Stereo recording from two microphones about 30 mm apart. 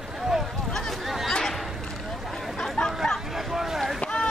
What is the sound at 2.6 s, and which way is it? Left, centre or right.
Chatter, left.